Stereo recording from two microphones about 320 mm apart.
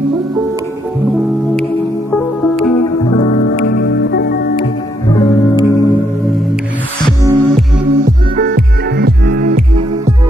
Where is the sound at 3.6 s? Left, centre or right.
Left.